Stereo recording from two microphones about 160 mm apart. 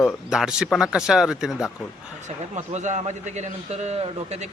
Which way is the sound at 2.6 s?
45° right (ahead or behind).